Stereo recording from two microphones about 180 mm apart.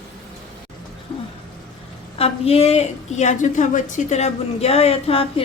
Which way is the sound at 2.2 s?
35° left (ahead or behind).